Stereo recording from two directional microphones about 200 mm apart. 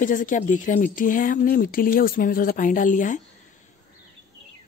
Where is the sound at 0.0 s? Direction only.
40° left (ahead or behind).